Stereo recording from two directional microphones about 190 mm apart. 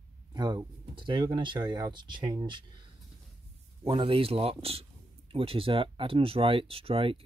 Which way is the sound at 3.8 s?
25° right (ahead or behind).